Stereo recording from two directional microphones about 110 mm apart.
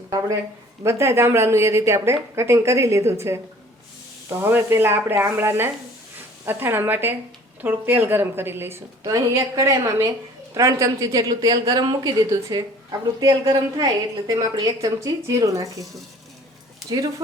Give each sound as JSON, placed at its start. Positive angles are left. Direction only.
{"t": 0.8, "sound": "a woman's voice", "side_deg": -25}